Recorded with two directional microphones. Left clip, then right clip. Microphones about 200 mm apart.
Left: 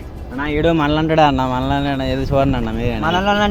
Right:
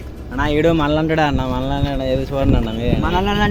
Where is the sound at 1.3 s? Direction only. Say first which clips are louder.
Left 3 dB; 35° left (ahead or behind).